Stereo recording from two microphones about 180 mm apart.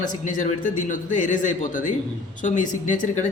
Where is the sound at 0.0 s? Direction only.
45° left (ahead or behind).